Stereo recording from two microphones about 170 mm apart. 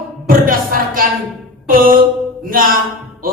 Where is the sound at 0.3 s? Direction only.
55° right (ahead or behind).